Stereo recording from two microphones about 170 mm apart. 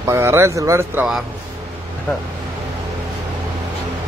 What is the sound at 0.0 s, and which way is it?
Speech, 15° right (ahead or behind).